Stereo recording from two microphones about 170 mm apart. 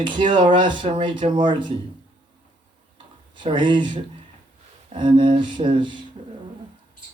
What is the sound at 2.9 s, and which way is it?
Tick-tock, 30° right (ahead or behind).